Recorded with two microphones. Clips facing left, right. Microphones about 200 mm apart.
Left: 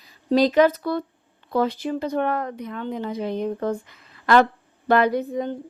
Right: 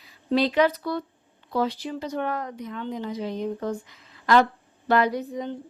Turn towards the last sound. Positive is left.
turn(degrees=55)  # may be behind; listen again after turning